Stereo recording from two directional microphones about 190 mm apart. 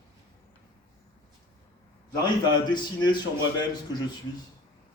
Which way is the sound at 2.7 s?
25° left (ahead or behind).